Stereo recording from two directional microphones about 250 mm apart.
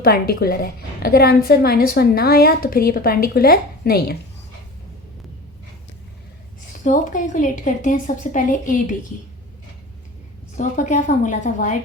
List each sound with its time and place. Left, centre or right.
0.0 s a woman's voice: left
6.7 s a woman's voice: left
10.5 s a woman's voice: left